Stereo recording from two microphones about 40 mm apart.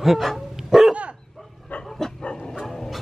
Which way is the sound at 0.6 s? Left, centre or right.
Centre.